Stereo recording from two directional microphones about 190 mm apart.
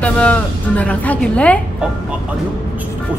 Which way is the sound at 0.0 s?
5° left (ahead or behind).